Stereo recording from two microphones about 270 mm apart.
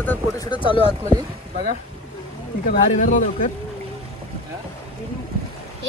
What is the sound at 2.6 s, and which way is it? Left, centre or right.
Speech, left.